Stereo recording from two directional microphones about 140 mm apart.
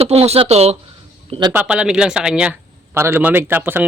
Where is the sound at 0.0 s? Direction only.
45° right (ahead or behind).